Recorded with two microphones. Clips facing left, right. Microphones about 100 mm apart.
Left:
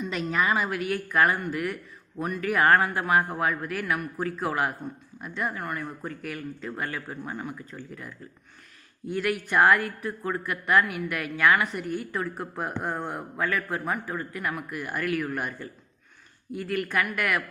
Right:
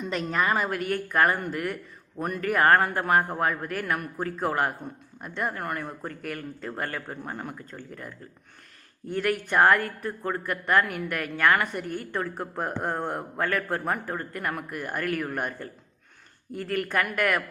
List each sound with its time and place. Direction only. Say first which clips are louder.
0.0 s a woman's voice: even; 45° right (ahead or behind)